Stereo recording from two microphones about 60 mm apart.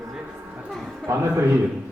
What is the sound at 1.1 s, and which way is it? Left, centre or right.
Speech, right.